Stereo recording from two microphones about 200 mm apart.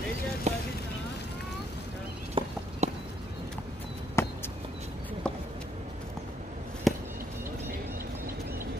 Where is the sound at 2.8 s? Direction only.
35° right (ahead or behind).